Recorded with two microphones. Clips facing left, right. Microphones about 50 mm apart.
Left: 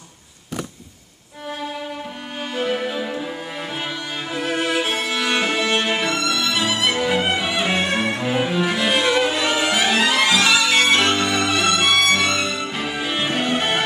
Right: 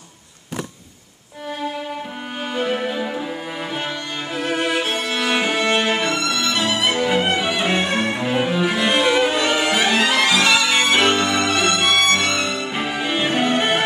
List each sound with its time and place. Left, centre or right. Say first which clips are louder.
2.5 s music: right 1 dB; centre
10.9 s violin: right 1 dB; centre